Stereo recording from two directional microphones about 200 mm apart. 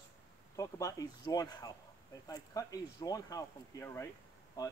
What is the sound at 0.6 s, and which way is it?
Speech, 15° left (ahead or behind).